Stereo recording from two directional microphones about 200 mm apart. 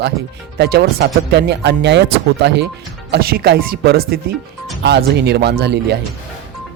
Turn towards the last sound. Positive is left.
turn(degrees=-55)  # may be behind; listen again after turning